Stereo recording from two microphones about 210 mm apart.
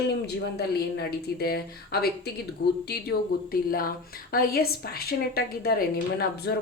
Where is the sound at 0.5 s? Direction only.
50° left (ahead or behind).